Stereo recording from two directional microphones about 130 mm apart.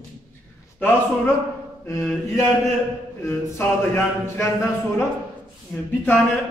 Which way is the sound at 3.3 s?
15° left (ahead or behind).